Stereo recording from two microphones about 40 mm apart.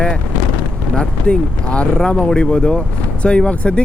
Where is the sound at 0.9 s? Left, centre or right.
Left.